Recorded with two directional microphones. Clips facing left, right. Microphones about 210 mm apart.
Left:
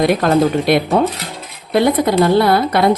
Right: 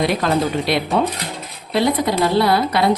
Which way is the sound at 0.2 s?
45° left (ahead or behind).